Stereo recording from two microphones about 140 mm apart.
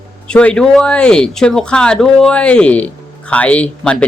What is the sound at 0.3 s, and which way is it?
Speech, 5° left (ahead or behind).